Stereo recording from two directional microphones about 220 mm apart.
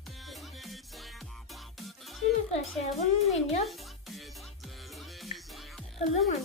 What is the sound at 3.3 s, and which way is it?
Speech, 30° left (ahead or behind).